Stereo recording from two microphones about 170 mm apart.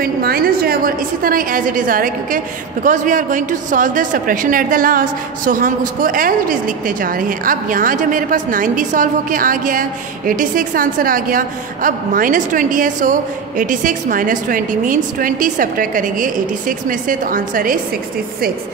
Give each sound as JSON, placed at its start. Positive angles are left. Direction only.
{"t": 0.0, "sound": "a woman's voice", "side_deg": -60}